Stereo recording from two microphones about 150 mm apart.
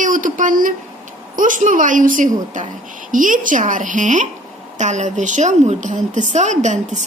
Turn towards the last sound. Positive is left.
turn(degrees=-55)  # may be behind; listen again after turning